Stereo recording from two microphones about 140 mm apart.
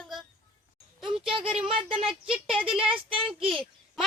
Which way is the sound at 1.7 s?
40° right (ahead or behind).